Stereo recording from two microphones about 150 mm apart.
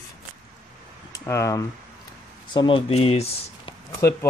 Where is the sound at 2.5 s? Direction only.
30° left (ahead or behind).